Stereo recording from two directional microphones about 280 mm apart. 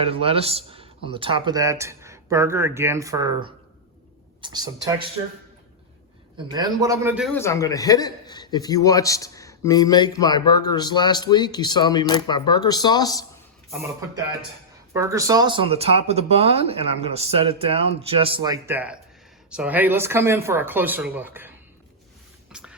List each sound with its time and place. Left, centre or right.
0.0 s speech: centre
6.3 s speech: centre
7.3 s a man's voice: centre
13.7 s a man's voice: centre
14.9 s speech: centre
22.5 s a sound: centre